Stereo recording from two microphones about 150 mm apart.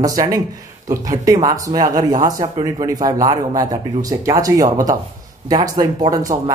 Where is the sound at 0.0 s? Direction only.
25° right (ahead or behind).